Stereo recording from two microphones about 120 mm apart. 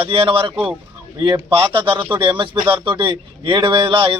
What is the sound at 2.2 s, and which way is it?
Speech, 45° right (ahead or behind).